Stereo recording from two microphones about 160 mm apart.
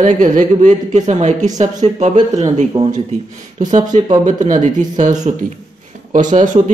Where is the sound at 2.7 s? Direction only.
20° right (ahead or behind).